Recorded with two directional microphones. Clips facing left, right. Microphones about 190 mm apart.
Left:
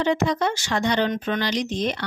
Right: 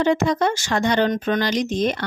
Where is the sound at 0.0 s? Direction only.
45° right (ahead or behind).